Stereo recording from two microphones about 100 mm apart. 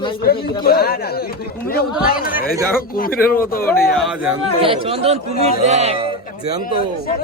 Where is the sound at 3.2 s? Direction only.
20° left (ahead or behind).